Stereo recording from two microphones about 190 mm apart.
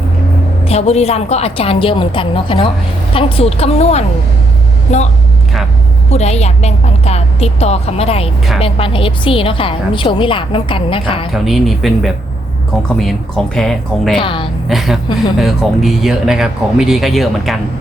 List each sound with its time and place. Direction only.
0.6 s a woman's voice: 35° left (ahead or behind)
6.1 s a woman's voice: 35° left (ahead or behind)
11.4 s speech: centre (ahead or behind)
14.2 s a woman's voice: 25° left (ahead or behind)
14.7 s speech: centre (ahead or behind)